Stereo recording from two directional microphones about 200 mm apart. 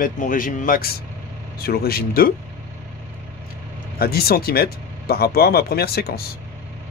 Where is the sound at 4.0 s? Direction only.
50° left (ahead or behind).